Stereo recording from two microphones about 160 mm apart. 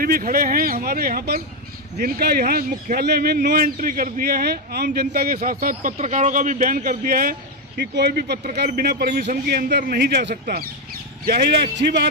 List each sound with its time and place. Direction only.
0.0 s a man's voice: 65° right (ahead or behind)
9.2 s a man's voice: 60° right (ahead or behind)
11.2 s speech: 85° right